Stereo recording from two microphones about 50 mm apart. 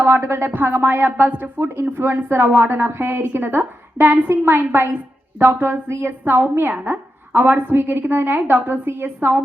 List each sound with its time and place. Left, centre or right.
0.0 s a woman's voice: right
5.4 s a woman's voice: right